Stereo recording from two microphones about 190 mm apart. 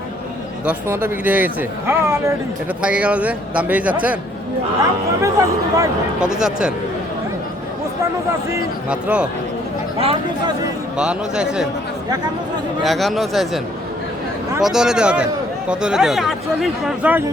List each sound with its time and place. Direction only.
0.6 s a man's voice: 10° right (ahead or behind)
5.2 s a man's voice: 15° right (ahead or behind)
6.1 s speech: 5° right (ahead or behind)
8.4 s a man's voice: 10° right (ahead or behind)
10.0 s speech: 30° right (ahead or behind)
10.9 s speech: 5° right (ahead or behind)
12.8 s speech: centre (ahead or behind)
14.6 s speech: 5° right (ahead or behind)